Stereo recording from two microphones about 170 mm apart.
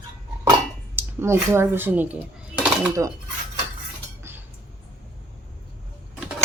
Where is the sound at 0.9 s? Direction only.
15° right (ahead or behind).